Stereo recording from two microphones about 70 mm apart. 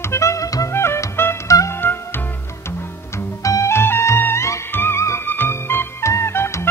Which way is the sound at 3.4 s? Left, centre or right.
Left.